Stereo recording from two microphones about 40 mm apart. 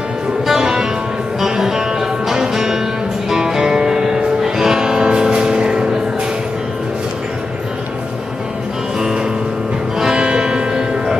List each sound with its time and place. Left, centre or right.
0.5 s music: centre
9.9 s music: centre